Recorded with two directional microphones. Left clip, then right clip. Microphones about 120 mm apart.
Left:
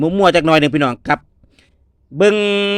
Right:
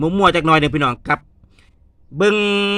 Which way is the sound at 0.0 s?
35° left (ahead or behind).